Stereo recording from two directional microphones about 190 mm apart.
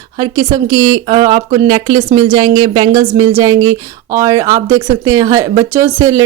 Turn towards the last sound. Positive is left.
turn(degrees=-15)  # may be behind; listen again after turning